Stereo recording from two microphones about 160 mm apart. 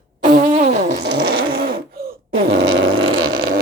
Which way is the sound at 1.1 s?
70° right (ahead or behind).